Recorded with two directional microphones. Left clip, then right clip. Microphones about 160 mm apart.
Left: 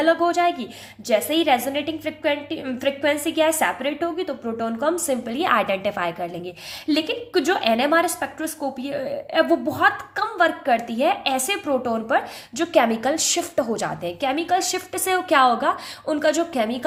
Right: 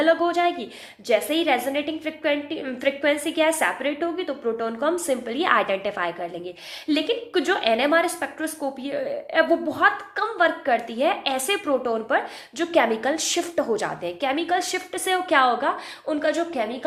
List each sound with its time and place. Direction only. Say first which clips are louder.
0.0 s a woman's voice: left 1 dB; 30° left (ahead or behind); by 16.6 s 55° left (ahead or behind)